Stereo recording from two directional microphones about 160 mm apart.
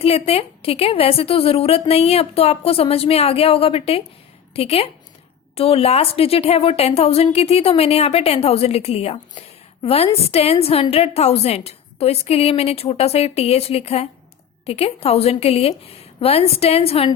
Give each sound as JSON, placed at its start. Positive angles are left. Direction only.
{"t": 0.0, "sound": "a woman's voice", "side_deg": 40}